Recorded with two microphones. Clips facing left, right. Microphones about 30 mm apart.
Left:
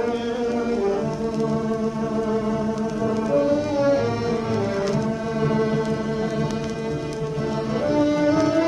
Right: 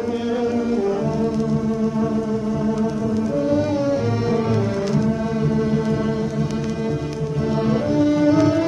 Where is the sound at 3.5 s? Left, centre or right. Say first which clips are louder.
Even; centre.